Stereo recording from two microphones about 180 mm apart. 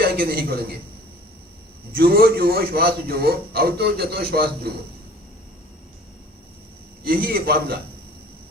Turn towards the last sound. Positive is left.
turn(degrees=-55)  # may be behind; listen again after turning